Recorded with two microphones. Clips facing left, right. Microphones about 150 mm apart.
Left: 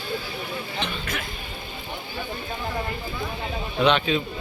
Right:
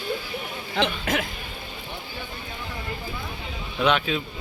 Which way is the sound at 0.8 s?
90° right.